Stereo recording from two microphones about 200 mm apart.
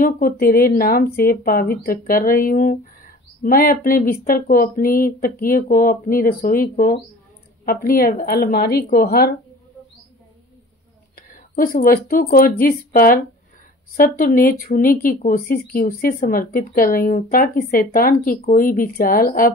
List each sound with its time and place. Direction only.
0.0 s speech: 45° left (ahead or behind)
11.1 s speech: 45° left (ahead or behind)